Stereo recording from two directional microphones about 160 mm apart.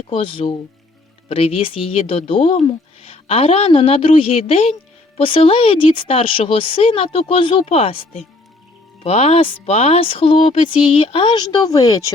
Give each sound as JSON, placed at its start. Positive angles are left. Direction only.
{"t": 0.1, "sound": "speech", "side_deg": 35}